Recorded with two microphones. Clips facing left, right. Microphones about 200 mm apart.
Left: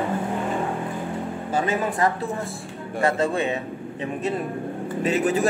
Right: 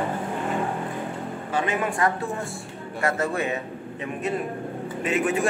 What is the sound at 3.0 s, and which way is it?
Speech, 30° left (ahead or behind).